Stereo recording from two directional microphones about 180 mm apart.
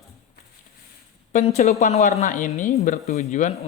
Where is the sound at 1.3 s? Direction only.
40° left (ahead or behind).